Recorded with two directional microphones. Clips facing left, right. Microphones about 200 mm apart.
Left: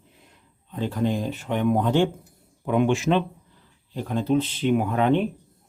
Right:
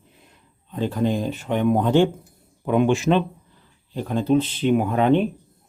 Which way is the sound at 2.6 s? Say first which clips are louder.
Right 2 dB; 35° right (ahead or behind).